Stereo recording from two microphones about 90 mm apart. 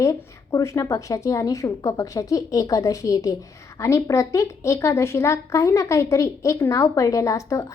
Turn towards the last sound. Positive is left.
turn(degrees=35)  # may be behind; listen again after turning